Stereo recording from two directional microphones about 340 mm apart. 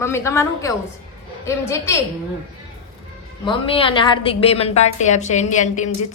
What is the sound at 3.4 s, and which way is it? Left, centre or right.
A woman's voice, centre.